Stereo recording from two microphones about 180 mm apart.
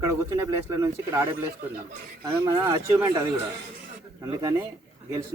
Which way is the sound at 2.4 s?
20° right (ahead or behind).